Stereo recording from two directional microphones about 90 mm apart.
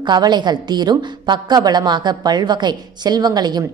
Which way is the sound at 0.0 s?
55° right (ahead or behind).